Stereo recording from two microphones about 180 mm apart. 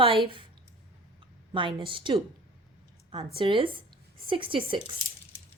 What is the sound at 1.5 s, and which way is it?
Speech, 30° right (ahead or behind).